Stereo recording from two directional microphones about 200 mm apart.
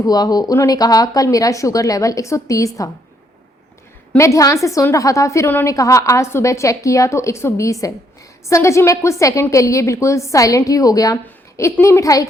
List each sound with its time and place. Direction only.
0.0 s a woman's voice: 20° left (ahead or behind)
4.1 s a woman's voice: 15° left (ahead or behind)